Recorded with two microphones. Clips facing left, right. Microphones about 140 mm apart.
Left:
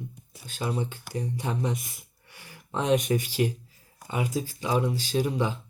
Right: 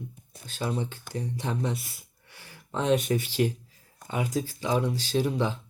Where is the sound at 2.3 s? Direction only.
15° left (ahead or behind).